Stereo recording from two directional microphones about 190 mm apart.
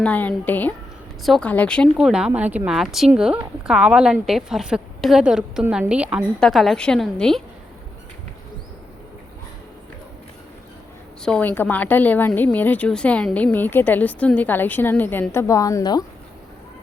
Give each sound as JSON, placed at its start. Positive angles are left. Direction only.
{"t": 0.0, "sound": "a woman's voice", "side_deg": 10}
{"t": 11.2, "sound": "a woman's voice", "side_deg": 5}